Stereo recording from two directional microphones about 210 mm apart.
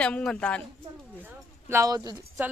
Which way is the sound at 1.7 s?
15° right (ahead or behind).